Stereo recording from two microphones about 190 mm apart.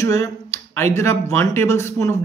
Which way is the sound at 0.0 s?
15° left (ahead or behind).